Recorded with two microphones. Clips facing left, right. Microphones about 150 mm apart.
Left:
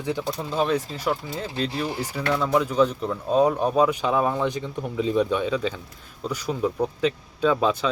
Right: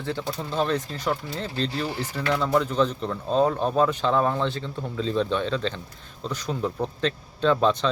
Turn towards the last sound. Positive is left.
turn(degrees=5)  # may be behind; listen again after turning